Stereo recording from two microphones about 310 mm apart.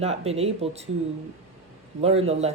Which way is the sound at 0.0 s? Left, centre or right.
Centre.